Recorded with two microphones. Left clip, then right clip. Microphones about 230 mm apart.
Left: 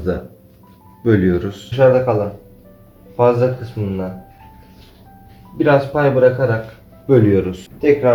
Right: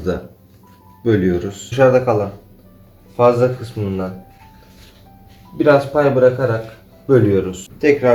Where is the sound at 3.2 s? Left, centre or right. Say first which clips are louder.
Right 1 dB; centre.